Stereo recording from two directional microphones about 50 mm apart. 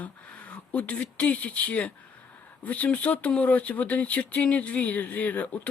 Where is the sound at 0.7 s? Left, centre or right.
Left.